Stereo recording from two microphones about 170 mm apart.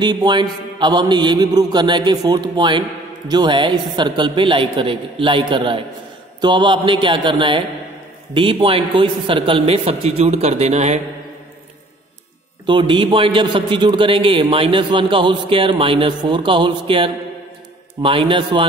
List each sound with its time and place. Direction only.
0.0 s a man's voice: 25° right (ahead or behind)
12.6 s a man's voice: 30° right (ahead or behind)